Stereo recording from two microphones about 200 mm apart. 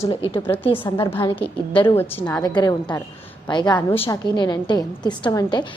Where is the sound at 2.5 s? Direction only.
20° left (ahead or behind).